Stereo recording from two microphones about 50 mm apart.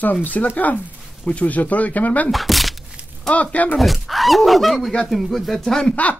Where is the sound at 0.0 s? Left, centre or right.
Left.